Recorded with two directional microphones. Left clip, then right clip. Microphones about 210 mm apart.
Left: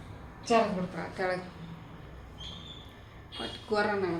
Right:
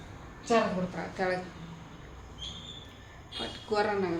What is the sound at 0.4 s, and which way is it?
Speech, centre (ahead or behind).